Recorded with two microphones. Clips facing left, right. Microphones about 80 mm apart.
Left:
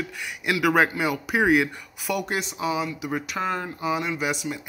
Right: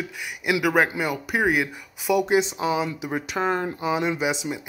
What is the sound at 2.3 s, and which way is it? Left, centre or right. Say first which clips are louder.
Speech: right 5 dB; right.